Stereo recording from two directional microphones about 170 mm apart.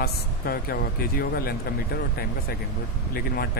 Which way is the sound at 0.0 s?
65° left (ahead or behind).